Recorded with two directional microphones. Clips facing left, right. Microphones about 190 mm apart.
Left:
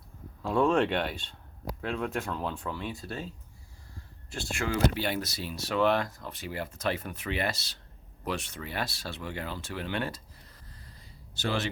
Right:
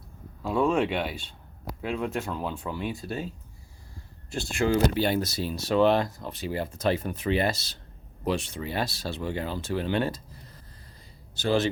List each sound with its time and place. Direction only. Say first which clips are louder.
0.4 s speech: right 1 dB; 5° right (ahead or behind)
4.3 s speech: right 7 dB; 25° right (ahead or behind); by 7.8 s 40° right (ahead or behind)
8.2 s speech: right 6 dB; 30° right (ahead or behind)